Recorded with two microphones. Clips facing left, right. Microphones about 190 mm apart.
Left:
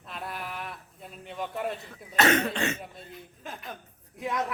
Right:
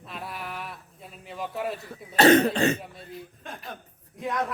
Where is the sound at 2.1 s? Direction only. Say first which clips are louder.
Right 7 dB; 35° right (ahead or behind).